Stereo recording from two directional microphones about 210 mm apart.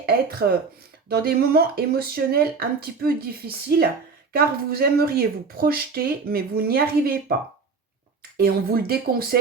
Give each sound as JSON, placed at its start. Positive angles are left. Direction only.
{"t": 0.0, "sound": "speech", "side_deg": -45}
{"t": 8.4, "sound": "speech", "side_deg": -45}